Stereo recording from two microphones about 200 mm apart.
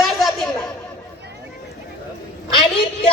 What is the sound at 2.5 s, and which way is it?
Speech, 25° left (ahead or behind).